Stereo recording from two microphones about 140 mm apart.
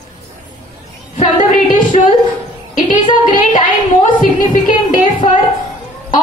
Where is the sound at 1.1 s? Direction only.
55° left (ahead or behind).